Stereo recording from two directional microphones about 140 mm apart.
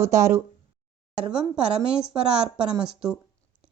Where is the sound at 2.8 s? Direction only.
5° right (ahead or behind).